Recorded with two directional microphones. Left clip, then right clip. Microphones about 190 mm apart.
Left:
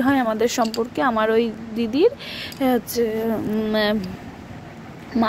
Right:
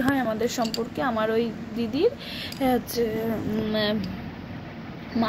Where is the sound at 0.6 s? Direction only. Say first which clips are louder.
Left 6 dB; 30° left (ahead or behind).